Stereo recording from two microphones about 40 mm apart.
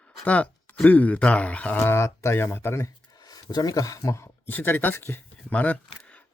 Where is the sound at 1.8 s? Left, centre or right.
Left.